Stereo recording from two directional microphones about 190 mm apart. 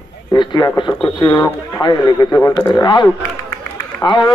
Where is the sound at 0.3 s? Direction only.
25° left (ahead or behind).